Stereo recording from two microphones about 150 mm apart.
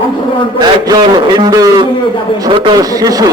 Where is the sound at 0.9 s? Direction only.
30° right (ahead or behind).